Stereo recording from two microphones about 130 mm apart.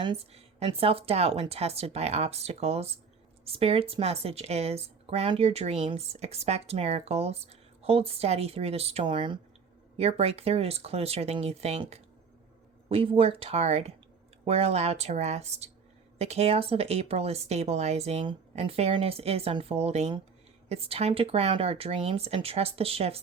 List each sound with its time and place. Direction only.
0.0 s a woman's voice: 45° right (ahead or behind)
10.0 s a woman's voice: 50° right (ahead or behind)
12.9 s a woman's voice: 45° right (ahead or behind)